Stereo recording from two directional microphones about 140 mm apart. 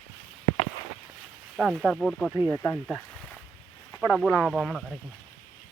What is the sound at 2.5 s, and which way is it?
Speech, 20° left (ahead or behind).